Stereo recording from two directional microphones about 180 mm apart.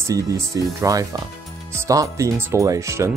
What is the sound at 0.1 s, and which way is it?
Speech, 20° right (ahead or behind).